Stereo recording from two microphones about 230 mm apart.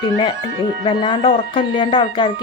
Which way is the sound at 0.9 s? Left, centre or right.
Left.